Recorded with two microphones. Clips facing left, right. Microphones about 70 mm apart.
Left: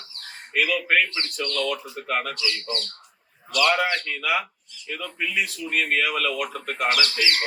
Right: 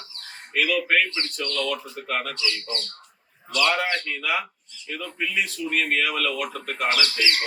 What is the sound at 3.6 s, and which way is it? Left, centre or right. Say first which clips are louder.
Speech: left 2 dB; centre.